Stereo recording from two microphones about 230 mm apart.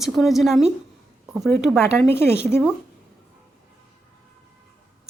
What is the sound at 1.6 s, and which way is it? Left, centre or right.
Speech, centre.